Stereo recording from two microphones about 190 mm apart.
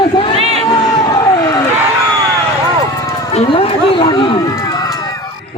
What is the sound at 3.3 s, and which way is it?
Speech, 30° left (ahead or behind).